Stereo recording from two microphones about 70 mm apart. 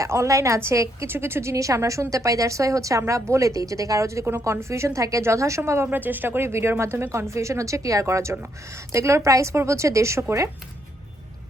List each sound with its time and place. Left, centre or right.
0.0 s a woman's voice: right
6.0 s a woman's voice: right